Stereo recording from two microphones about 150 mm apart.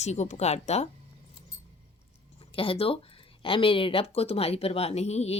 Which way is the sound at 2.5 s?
35° left (ahead or behind).